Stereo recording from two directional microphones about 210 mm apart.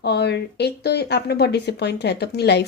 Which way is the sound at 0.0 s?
50° left (ahead or behind).